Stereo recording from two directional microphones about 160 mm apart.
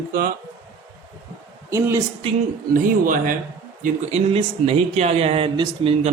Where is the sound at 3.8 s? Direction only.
45° right (ahead or behind).